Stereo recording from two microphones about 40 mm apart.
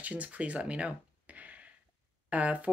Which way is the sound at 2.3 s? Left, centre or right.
Right.